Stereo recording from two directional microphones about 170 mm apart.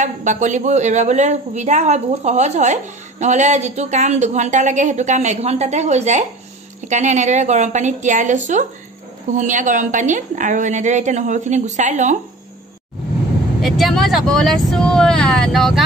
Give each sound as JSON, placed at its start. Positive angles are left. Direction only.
{"t": 0.0, "sound": "a woman's voice", "side_deg": -45}
{"t": 13.6, "sound": "speech", "side_deg": 0}